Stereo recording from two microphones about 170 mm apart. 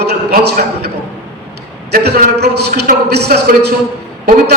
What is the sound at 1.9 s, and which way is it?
A man's voice, 75° right (ahead or behind).